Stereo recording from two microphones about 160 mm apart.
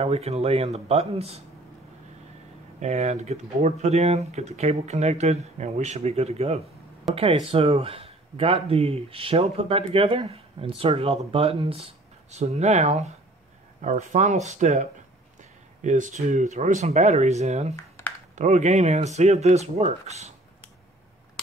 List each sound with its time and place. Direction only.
0.0 s speech: 40° right (ahead or behind)
2.8 s speech: 45° right (ahead or behind)